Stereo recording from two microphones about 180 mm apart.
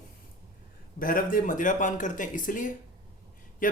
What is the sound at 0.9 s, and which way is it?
Speech, 50° left (ahead or behind).